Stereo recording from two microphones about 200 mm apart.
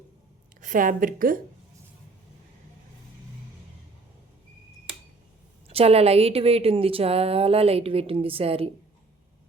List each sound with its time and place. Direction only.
0.6 s a woman's voice: 40° right (ahead or behind)
5.6 s a woman's voice: 30° right (ahead or behind)